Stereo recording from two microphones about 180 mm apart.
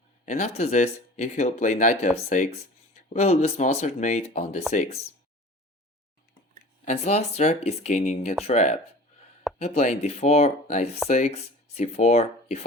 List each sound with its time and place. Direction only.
0.3 s speech: 35° left (ahead or behind)
6.8 s speech: 35° left (ahead or behind)